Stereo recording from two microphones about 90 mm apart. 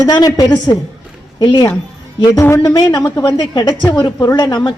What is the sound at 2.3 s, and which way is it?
A woman's voice, 35° left (ahead or behind).